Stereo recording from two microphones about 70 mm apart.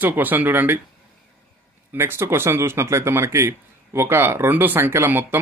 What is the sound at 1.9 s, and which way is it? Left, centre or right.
Speech, right.